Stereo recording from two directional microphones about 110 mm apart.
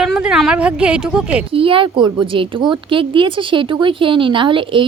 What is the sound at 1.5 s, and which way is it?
A woman's voice, 55° right (ahead or behind).